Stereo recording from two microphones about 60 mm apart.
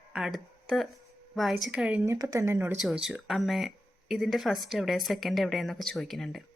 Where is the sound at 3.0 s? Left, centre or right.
Centre.